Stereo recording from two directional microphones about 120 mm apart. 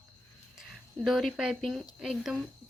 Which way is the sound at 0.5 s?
5° right (ahead or behind).